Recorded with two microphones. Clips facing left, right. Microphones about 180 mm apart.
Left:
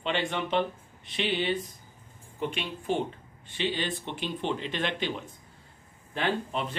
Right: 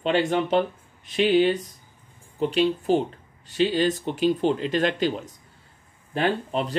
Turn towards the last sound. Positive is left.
turn(degrees=-35)  # may be behind; listen again after turning